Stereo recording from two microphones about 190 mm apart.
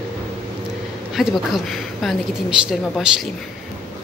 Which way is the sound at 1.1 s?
Centre (ahead or behind).